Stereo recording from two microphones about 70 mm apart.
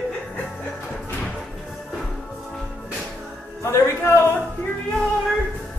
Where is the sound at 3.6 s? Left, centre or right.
Left.